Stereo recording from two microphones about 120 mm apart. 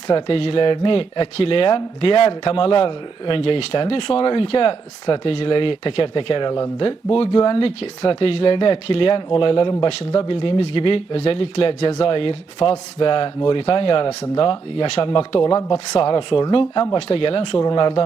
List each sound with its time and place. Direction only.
0.3 s speech: 55° left (ahead or behind)